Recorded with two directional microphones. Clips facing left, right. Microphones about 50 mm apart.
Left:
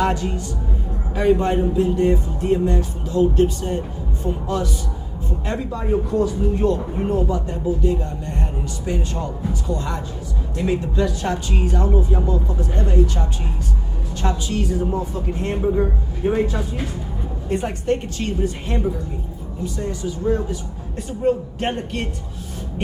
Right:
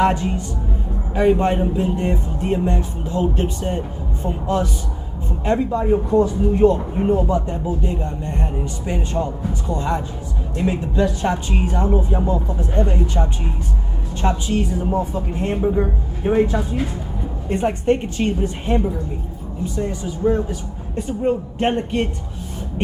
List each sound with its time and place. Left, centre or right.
0.0 s a man's voice: right
15.7 s speech: centre
17.5 s speech: right